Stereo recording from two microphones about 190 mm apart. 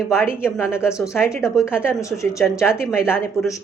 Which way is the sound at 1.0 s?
15° left (ahead or behind).